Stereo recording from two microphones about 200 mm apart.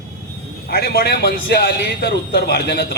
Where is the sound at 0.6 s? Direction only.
50° left (ahead or behind).